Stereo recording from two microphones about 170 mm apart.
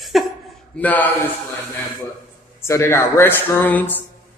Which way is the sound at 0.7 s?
10° left (ahead or behind).